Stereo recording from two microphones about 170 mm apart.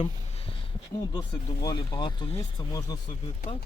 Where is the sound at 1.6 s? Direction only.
25° left (ahead or behind).